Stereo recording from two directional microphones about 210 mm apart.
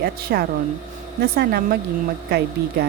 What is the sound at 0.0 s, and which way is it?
A woman's voice, 50° right (ahead or behind).